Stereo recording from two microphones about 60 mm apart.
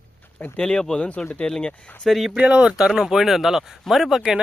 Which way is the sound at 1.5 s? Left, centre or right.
Centre.